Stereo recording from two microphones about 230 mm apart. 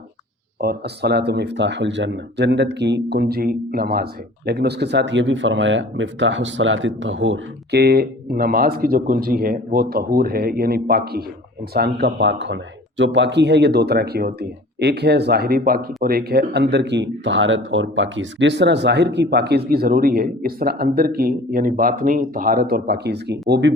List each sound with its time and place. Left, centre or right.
0.6 s speech: right